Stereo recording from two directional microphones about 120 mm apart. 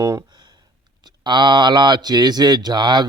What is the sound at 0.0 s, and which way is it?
Speech, 25° right (ahead or behind).